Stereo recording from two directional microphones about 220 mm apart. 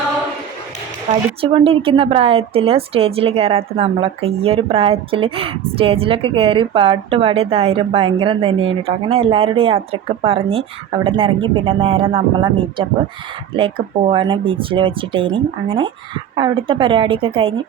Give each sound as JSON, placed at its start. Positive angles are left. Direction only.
{"t": 1.4, "sound": "a woman's voice", "side_deg": -25}